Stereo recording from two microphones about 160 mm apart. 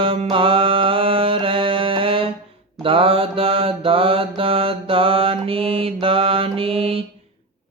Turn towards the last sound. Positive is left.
turn(degrees=-35)  # may be behind; listen again after turning